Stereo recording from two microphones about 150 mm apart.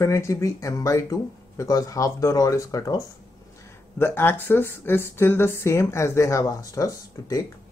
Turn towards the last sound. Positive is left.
turn(degrees=20)  # may be behind; listen again after turning